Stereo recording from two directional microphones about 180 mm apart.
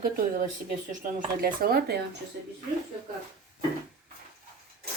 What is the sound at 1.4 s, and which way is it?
Speech, 55° right (ahead or behind).